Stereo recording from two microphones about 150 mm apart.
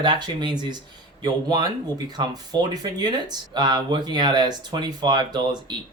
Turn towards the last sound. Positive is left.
turn(degrees=-30)  # may be behind; listen again after turning